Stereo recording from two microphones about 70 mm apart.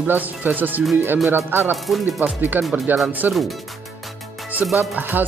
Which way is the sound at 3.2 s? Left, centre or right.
Right.